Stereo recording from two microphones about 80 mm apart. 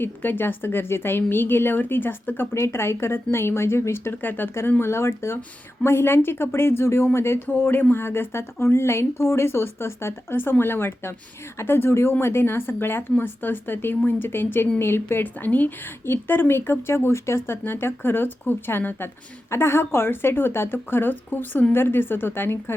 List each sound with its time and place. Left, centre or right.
0.0 s a woman's voice: left